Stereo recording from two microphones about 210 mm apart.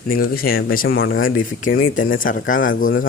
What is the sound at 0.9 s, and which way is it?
Speech, 70° left (ahead or behind).